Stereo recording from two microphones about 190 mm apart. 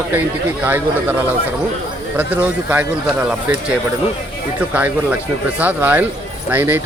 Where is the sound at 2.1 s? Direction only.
10° right (ahead or behind).